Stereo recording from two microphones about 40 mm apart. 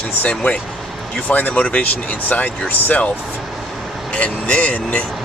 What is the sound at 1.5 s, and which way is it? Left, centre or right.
Speech, left.